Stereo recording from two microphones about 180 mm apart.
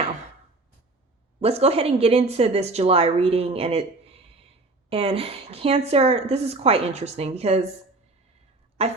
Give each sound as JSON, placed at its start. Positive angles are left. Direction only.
{"t": 1.4, "sound": "a woman's voice", "side_deg": -35}
{"t": 8.8, "sound": "a woman's voice", "side_deg": -35}